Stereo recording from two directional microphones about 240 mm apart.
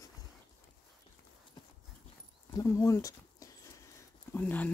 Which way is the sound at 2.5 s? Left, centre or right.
Centre.